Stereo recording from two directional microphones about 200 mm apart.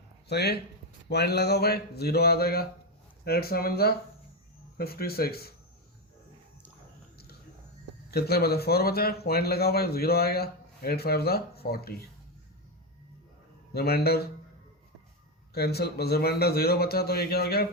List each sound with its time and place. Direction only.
0.3 s speech: 55° left (ahead or behind)
8.1 s speech: 50° left (ahead or behind)
13.7 s speech: 50° left (ahead or behind)
15.5 s speech: 55° left (ahead or behind)